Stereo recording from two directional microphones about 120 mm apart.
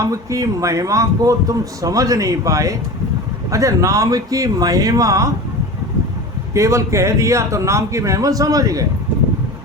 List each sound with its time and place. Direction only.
0.0 s a man's voice: 30° right (ahead or behind)
6.5 s a man's voice: 25° right (ahead or behind)